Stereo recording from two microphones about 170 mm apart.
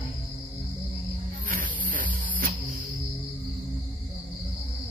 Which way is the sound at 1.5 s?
55° right (ahead or behind).